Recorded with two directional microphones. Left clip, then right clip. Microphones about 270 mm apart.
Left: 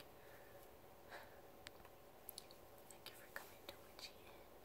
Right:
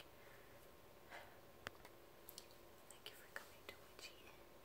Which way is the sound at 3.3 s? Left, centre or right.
Centre.